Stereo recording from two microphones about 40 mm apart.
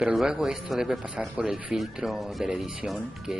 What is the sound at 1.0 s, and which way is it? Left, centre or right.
Speech, right.